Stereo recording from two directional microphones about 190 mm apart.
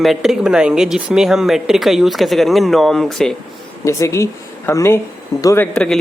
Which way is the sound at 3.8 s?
15° left (ahead or behind).